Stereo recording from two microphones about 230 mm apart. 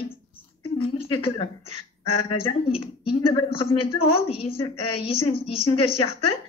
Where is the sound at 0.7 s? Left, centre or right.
Left.